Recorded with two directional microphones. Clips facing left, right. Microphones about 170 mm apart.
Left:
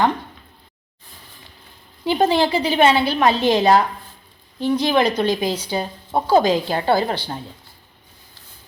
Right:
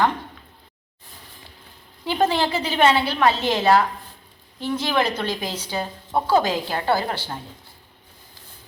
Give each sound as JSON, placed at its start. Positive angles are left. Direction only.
{"t": 2.0, "sound": "a woman's voice", "side_deg": 15}